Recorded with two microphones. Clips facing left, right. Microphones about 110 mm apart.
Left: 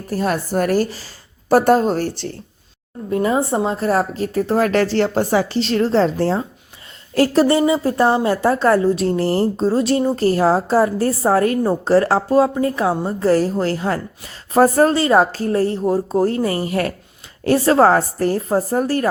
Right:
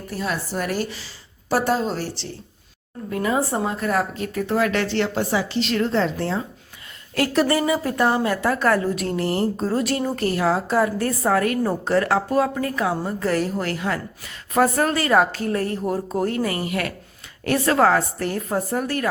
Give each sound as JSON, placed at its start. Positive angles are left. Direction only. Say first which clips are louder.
{"t": 0.1, "sound": "a woman's voice", "louder": "left 7 dB", "side_deg": 45}
{"t": 3.1, "sound": "a woman's voice", "louder": "left 5 dB", "side_deg": 25}